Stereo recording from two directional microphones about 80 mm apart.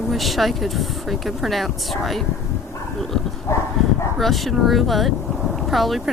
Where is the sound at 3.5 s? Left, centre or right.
Left.